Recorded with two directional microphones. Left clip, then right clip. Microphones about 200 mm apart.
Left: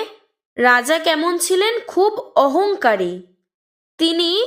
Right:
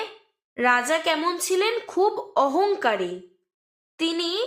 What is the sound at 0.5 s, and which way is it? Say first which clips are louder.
Speech: left 7 dB; 40° left (ahead or behind).